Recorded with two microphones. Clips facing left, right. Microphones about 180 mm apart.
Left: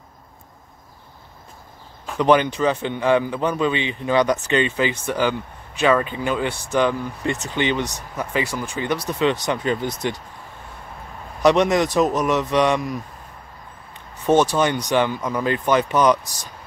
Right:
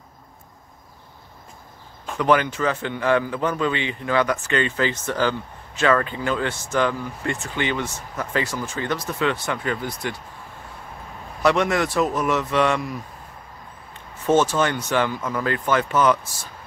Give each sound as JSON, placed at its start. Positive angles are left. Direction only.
{"t": 2.1, "sound": "a man's voice", "side_deg": 20}
{"t": 11.4, "sound": "a man's voice", "side_deg": 20}
{"t": 14.2, "sound": "speech", "side_deg": 15}